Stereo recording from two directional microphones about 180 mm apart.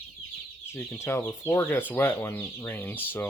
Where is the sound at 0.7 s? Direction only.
15° left (ahead or behind).